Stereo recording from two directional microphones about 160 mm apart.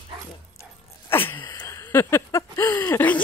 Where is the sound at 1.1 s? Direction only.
15° left (ahead or behind).